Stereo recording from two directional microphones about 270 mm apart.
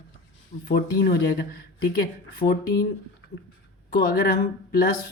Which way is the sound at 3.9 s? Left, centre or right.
Left.